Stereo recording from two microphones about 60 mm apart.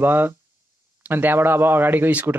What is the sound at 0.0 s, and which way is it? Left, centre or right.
Speech, right.